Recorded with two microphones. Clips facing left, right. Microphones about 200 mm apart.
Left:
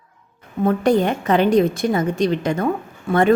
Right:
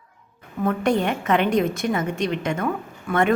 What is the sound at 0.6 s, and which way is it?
A woman's voice, 35° left (ahead or behind).